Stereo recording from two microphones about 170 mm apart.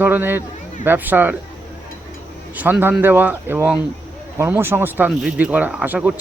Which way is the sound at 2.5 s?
10° right (ahead or behind).